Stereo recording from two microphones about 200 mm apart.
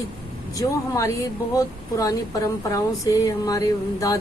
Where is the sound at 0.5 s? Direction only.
15° left (ahead or behind).